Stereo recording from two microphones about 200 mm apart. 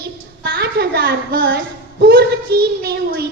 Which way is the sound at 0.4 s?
55° right (ahead or behind).